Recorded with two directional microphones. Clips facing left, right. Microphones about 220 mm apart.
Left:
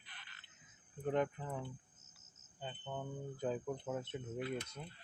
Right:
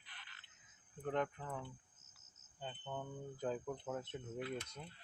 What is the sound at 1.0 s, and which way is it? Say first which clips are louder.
Speech: left 3 dB; 10° left (ahead or behind).